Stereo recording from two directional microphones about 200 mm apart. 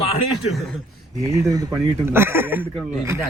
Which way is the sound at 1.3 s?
15° right (ahead or behind).